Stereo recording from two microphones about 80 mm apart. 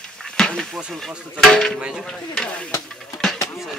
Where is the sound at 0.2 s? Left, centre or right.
Centre.